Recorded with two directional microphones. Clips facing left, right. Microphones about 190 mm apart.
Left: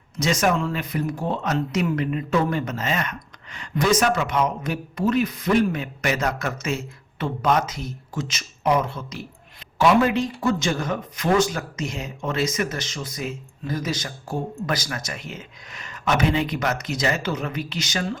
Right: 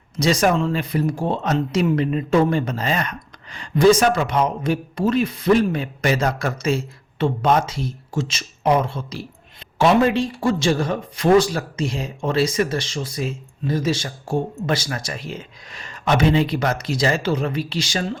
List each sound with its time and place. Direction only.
0.2 s speech: 35° right (ahead or behind)